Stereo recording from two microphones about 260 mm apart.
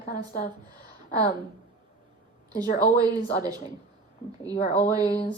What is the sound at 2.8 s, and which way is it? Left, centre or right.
Speech, centre.